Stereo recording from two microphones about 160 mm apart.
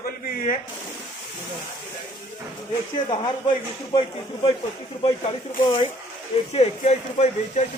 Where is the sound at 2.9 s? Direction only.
30° left (ahead or behind).